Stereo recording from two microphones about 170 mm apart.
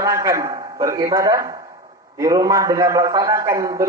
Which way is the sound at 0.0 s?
20° right (ahead or behind).